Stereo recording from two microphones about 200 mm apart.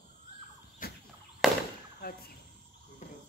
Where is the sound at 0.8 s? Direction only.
45° left (ahead or behind).